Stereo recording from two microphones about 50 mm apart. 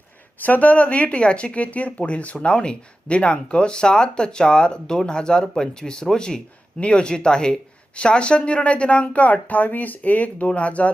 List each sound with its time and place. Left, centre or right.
0.4 s speech: left